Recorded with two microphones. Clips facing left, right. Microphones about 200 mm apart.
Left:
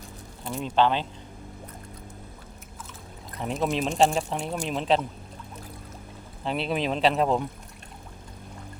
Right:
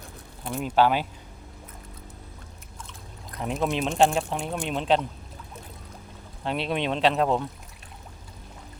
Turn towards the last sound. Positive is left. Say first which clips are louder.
# even
turn(degrees=0)  # may be behind; listen again after turning